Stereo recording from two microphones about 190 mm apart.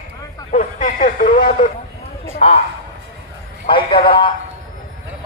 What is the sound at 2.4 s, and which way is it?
Speech, 30° left (ahead or behind).